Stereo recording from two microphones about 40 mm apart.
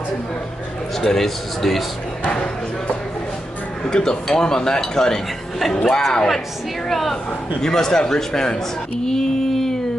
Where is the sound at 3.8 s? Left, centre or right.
Centre.